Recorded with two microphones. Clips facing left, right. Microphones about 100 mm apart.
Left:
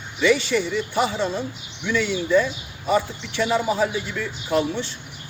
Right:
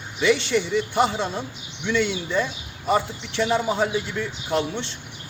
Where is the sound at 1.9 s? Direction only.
25° right (ahead or behind).